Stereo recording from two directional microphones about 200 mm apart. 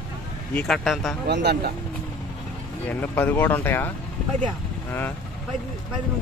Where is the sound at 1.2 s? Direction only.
55° right (ahead or behind).